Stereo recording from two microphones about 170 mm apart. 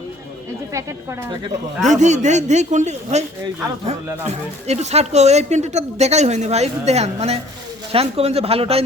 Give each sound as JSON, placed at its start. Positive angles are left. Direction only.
{"t": 1.8, "sound": "a man's voice", "side_deg": -45}